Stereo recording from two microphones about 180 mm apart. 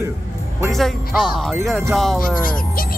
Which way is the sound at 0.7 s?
Centre (ahead or behind).